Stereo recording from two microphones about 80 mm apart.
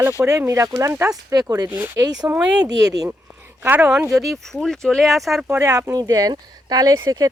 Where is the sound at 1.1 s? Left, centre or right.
Right.